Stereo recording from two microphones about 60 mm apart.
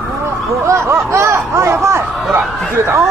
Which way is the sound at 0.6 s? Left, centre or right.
Right.